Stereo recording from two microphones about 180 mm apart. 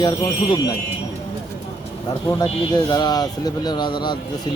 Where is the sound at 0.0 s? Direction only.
20° left (ahead or behind).